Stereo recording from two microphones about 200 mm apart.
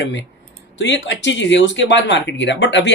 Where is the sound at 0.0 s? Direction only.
65° left (ahead or behind).